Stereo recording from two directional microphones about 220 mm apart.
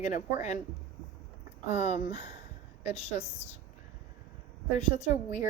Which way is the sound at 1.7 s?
30° left (ahead or behind).